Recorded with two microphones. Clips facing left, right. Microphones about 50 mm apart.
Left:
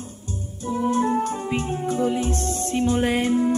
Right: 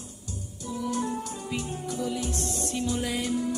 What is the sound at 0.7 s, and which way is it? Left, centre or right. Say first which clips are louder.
Music: left 9 dB; left.